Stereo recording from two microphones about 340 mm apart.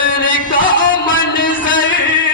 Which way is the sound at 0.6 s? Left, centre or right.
Left.